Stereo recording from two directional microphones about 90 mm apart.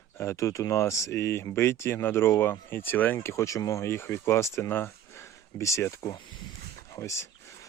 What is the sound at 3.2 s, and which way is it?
Speech, 35° left (ahead or behind).